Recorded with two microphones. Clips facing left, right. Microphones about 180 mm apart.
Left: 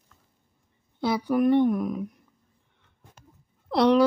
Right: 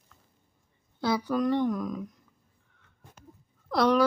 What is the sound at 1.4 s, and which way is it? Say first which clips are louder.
Speech: left 9 dB; 25° left (ahead or behind).